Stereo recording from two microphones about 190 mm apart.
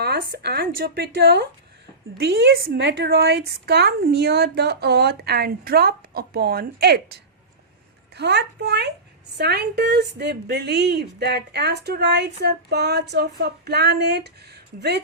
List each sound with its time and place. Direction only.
0.0 s a woman's voice: 60° right (ahead or behind)